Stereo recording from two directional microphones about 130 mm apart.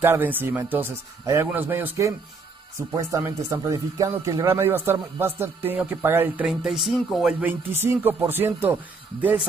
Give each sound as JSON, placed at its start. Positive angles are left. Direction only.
{"t": 0.0, "sound": "speech", "side_deg": -15}